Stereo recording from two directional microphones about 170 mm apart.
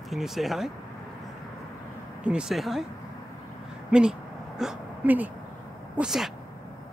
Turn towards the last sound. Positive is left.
turn(degrees=-5)  # may be behind; listen again after turning